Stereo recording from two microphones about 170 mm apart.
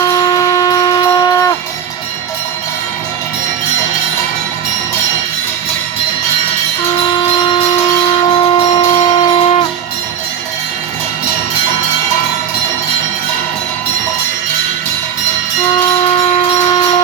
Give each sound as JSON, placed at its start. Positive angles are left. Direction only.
{"t": 0.0, "sound": "shofar", "side_deg": 20}
{"t": 7.1, "sound": "a sound", "side_deg": 30}
{"t": 8.2, "sound": "shofar", "side_deg": 30}